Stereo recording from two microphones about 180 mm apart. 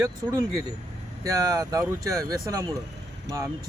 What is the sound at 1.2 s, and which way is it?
Speech, 20° right (ahead or behind).